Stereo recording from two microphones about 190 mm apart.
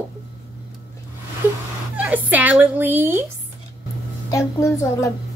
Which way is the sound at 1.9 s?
5° right (ahead or behind).